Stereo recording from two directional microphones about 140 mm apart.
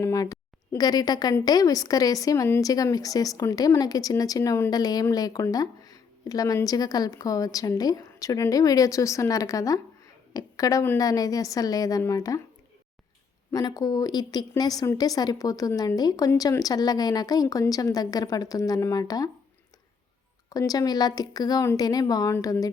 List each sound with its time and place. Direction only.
0.0 s a sound: 25° left (ahead or behind)
1.5 s speech: 25° left (ahead or behind)
13.5 s speech: 25° left (ahead or behind)
20.5 s speech: 25° left (ahead or behind)